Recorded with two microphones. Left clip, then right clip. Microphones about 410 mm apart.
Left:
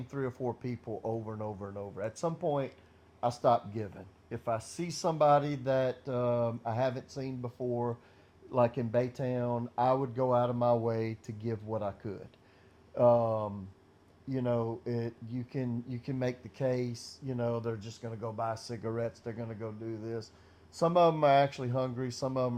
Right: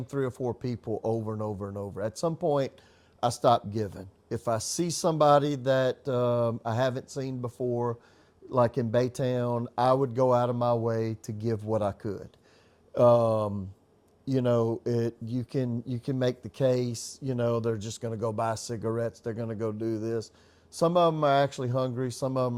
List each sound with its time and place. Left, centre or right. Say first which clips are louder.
0.1 s speech: right 5 dB; right
3.2 s speech: right 4 dB; right
18.8 s speech: right 5 dB; right
20.7 s speech: right 2 dB; right